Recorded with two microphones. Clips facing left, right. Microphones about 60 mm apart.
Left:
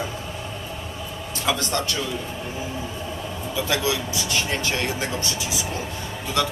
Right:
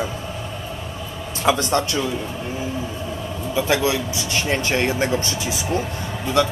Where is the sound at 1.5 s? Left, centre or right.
Right.